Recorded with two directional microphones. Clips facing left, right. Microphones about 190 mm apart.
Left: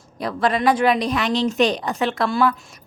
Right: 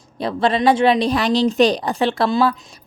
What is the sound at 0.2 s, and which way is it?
A woman's voice, 25° right (ahead or behind).